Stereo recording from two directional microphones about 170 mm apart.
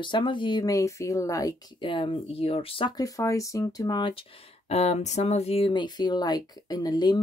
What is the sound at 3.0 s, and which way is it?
Speech, 20° left (ahead or behind).